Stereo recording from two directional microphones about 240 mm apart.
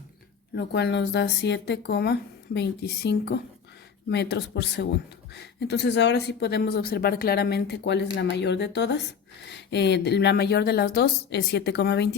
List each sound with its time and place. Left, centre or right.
0.5 s speech: left